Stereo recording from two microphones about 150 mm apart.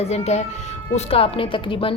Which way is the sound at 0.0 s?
45° left (ahead or behind).